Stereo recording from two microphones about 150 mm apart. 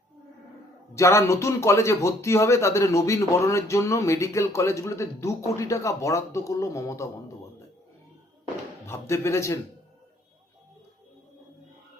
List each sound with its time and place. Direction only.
0.9 s speech: 20° left (ahead or behind)
8.9 s speech: 20° left (ahead or behind)